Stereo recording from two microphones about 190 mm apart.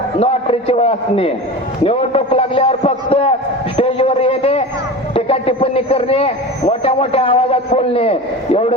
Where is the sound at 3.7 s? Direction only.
30° left (ahead or behind).